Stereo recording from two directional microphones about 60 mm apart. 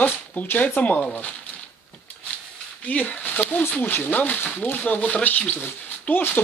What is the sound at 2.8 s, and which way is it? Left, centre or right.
Speech, left.